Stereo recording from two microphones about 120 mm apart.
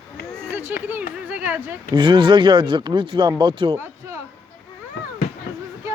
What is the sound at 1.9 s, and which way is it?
Speech, 45° right (ahead or behind).